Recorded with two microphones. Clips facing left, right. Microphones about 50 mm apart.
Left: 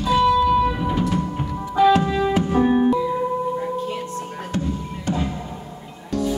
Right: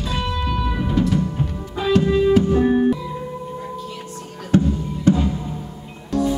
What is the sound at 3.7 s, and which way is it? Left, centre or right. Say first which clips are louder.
Singing bowl: left 5 dB; left.